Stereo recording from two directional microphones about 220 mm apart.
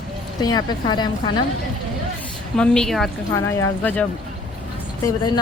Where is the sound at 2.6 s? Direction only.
Centre (ahead or behind).